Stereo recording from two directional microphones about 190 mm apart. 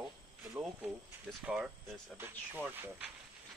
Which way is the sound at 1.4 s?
5° right (ahead or behind).